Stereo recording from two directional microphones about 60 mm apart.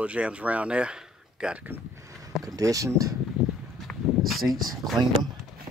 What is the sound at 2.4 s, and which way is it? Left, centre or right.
Speech, right.